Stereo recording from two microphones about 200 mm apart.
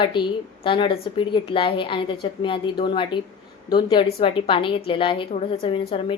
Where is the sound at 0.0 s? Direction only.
25° left (ahead or behind).